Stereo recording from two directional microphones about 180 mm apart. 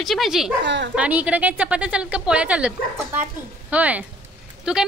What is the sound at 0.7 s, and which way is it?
Speech, 75° right (ahead or behind).